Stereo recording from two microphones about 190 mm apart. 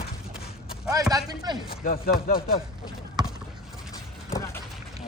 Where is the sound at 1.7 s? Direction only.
50° left (ahead or behind).